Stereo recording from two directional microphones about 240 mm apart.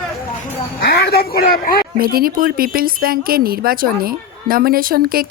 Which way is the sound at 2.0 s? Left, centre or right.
Right.